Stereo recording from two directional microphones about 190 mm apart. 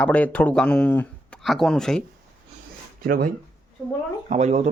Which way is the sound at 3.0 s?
50° right (ahead or behind).